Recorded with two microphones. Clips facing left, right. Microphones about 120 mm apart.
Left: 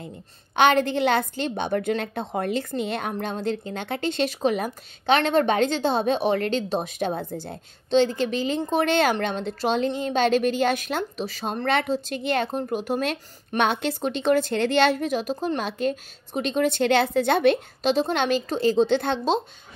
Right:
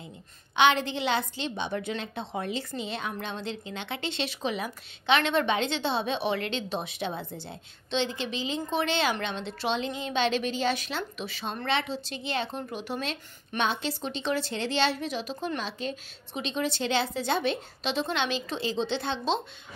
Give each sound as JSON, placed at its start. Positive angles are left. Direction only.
{"t": 0.6, "sound": "a woman's voice", "side_deg": 50}
{"t": 11.1, "sound": "a woman's voice", "side_deg": 40}
{"t": 13.6, "sound": "speech", "side_deg": 60}
{"t": 17.8, "sound": "a woman's voice", "side_deg": 45}